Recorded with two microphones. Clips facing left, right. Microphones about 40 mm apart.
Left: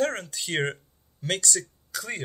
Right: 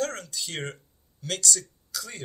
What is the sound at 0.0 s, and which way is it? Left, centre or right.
Speech, left.